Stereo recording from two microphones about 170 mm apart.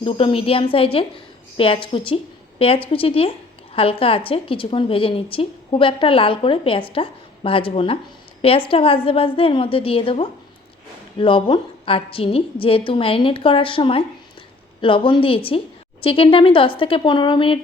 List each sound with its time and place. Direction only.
0.0 s a woman's voice: 30° left (ahead or behind)